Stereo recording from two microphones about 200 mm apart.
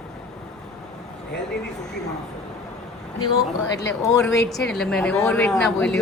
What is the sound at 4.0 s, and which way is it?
Speech, 15° left (ahead or behind).